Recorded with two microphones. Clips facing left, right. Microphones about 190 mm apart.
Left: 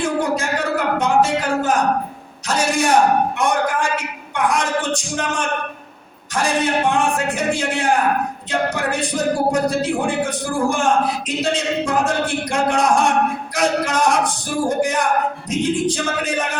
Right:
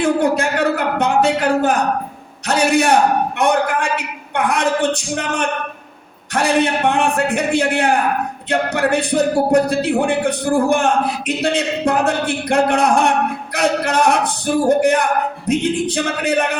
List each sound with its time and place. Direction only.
0.0 s speech: 60° right (ahead or behind)
0.9 s a sound: 60° right (ahead or behind)
2.5 s speech: 60° right (ahead or behind)